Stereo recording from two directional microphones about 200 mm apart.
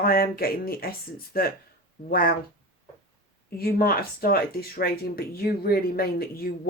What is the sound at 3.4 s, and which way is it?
Speech, 50° left (ahead or behind).